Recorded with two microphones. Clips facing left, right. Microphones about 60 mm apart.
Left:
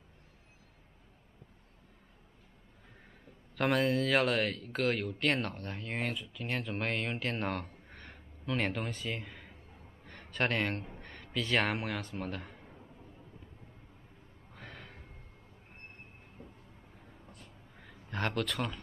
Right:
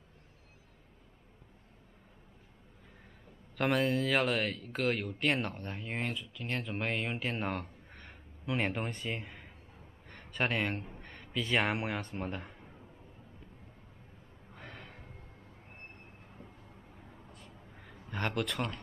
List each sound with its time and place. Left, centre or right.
3.5 s a man's voice: centre
14.5 s gasp: centre
17.7 s a sound: centre